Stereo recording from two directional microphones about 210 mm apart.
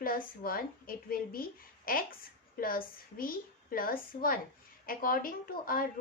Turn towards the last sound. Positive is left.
turn(degrees=45)  # may be behind; listen again after turning